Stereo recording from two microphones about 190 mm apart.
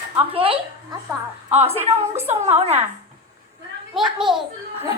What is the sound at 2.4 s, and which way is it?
Speech, 30° right (ahead or behind).